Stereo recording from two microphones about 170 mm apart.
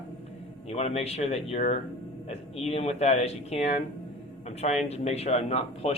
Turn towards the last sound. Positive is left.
turn(degrees=40)  # may be behind; listen again after turning